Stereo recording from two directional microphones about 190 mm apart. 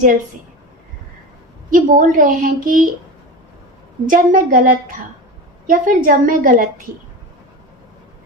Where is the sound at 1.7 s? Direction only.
45° right (ahead or behind).